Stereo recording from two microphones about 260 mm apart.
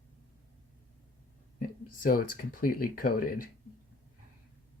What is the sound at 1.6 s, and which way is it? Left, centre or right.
Speech, left.